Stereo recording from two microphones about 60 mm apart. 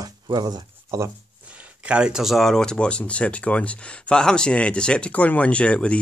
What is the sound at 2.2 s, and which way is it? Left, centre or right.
Speech, centre.